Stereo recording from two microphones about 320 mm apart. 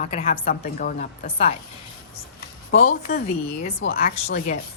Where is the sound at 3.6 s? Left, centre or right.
Left.